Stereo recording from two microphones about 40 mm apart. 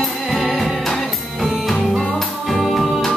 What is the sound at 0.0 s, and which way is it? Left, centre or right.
Music, centre.